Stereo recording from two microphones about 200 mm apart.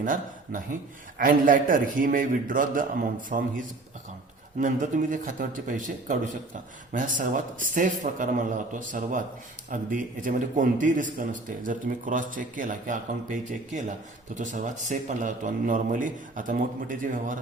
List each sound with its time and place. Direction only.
0.0 s a man's voice: 40° right (ahead or behind)
4.6 s a man's voice: 40° right (ahead or behind)